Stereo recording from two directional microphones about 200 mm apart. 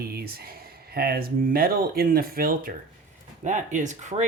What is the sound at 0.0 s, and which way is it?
Speech, 50° right (ahead or behind).